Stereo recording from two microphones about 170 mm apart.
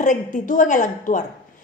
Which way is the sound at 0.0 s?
45° left (ahead or behind).